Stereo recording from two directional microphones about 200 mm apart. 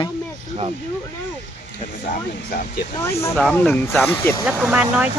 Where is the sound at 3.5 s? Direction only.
5° left (ahead or behind).